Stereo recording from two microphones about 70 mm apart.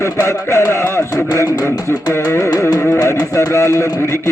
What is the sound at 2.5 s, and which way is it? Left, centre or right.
A man's voice, left.